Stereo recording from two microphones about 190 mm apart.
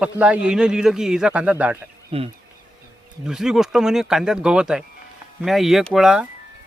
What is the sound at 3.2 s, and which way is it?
Speech, 5° right (ahead or behind).